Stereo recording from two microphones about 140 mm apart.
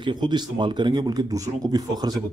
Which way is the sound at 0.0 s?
30° right (ahead or behind).